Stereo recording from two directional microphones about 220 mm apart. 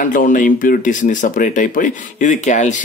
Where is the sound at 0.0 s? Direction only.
35° left (ahead or behind).